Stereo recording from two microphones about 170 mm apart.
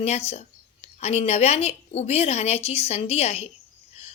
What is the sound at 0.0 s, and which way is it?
A woman's voice, 40° left (ahead or behind).